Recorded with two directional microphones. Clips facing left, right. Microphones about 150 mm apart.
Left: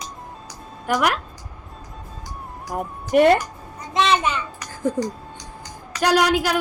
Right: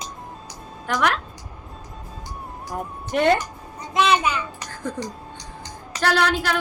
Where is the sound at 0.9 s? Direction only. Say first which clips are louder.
Left 2 dB; 10° left (ahead or behind).